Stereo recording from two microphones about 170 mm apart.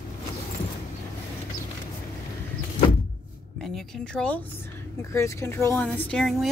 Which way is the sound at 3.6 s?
Centre (ahead or behind).